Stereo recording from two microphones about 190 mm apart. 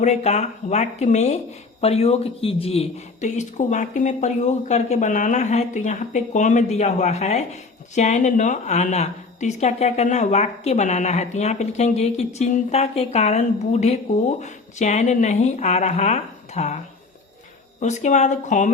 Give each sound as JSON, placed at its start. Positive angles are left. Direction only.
{"t": 0.0, "sound": "a man's voice", "side_deg": 35}
{"t": 17.7, "sound": "a man's voice", "side_deg": 40}